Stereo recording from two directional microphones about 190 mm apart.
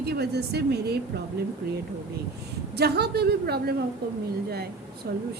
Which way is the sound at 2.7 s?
60° right (ahead or behind).